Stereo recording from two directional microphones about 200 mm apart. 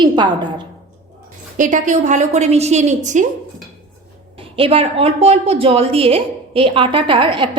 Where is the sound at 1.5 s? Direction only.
40° right (ahead or behind).